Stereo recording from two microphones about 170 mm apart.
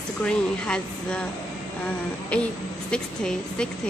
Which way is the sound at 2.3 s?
5° left (ahead or behind).